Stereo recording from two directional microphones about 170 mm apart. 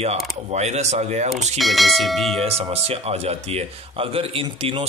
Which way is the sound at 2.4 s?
35° right (ahead or behind).